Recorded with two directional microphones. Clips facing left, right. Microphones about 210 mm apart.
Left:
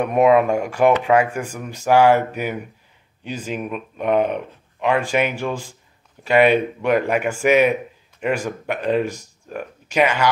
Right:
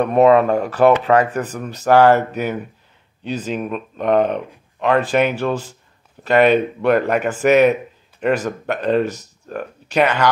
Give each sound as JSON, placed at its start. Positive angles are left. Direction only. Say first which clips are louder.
{"t": 0.0, "sound": "speech", "louder": "right 2 dB", "side_deg": 10}